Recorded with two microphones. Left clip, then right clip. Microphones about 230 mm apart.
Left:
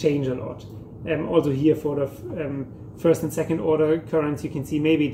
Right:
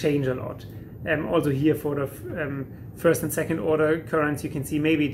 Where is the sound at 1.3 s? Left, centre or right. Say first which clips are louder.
Left 4 dB; centre.